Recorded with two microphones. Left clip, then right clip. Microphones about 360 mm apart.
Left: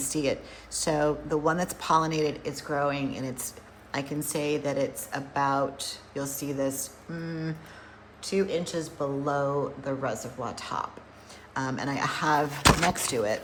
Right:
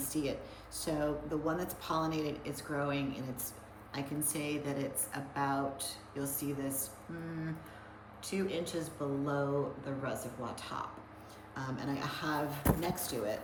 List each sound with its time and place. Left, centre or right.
0.0 s a woman's voice: centre
8.2 s a woman's voice: centre